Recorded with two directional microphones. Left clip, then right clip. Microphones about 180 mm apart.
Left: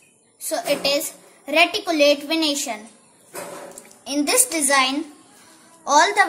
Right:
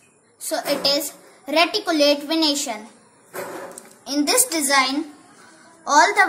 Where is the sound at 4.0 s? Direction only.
25° left (ahead or behind).